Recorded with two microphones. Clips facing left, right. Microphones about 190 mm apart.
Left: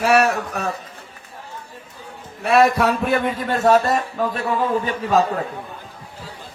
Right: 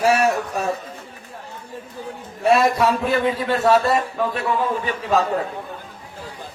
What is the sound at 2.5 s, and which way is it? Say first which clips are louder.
Speech: left 1 dB; 60° left (ahead or behind).